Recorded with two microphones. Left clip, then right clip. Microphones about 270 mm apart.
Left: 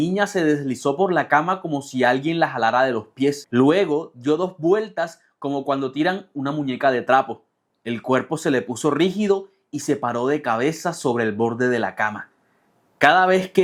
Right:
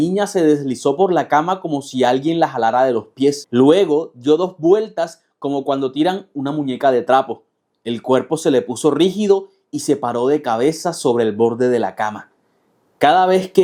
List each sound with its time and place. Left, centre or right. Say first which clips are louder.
0.1 s speech: right 5 dB; left